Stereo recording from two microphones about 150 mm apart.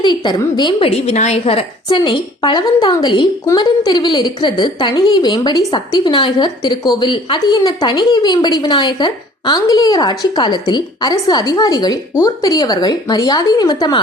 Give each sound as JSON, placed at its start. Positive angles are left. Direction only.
{"t": 0.0, "sound": "a woman's voice", "side_deg": 30}
{"t": 2.0, "sound": "a woman's voice", "side_deg": 30}